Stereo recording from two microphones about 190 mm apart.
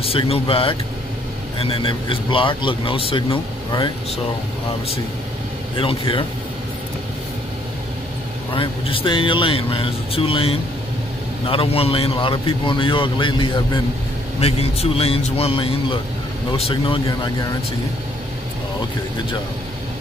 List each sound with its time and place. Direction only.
0.0 s a man's voice: 30° left (ahead or behind)
5.8 s a man's voice: 25° left (ahead or behind)
8.5 s a man's voice: 30° left (ahead or behind)